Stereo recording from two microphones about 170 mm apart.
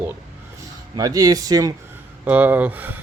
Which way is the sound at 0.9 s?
20° right (ahead or behind).